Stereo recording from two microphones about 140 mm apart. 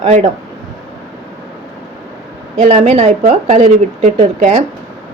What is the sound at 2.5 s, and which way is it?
Speech, 50° right (ahead or behind).